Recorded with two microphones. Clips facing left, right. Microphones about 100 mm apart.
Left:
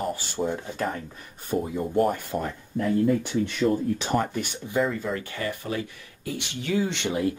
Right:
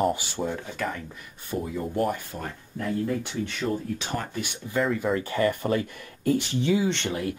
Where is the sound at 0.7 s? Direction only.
35° left (ahead or behind).